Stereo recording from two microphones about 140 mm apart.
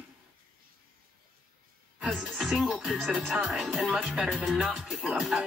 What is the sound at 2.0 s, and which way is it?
Speech, 5° right (ahead or behind).